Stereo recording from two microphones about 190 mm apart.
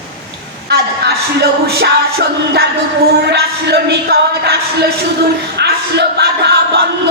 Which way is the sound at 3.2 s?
60° right (ahead or behind).